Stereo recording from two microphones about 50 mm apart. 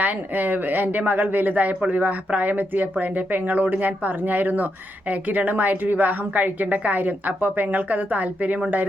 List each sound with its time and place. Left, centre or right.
0.0 s speech: right